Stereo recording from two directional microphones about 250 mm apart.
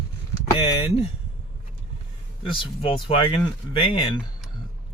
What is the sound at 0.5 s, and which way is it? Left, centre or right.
Speech, left.